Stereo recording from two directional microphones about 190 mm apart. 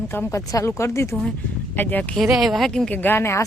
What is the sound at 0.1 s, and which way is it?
A woman's voice, 15° left (ahead or behind).